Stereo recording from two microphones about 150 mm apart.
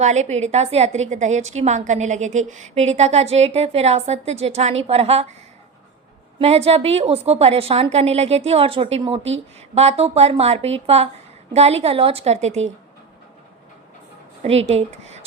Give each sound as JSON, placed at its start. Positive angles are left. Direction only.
{"t": 0.0, "sound": "a woman's voice", "side_deg": -50}
{"t": 6.4, "sound": "a woman's voice", "side_deg": -45}
{"t": 14.4, "sound": "a woman's voice", "side_deg": -45}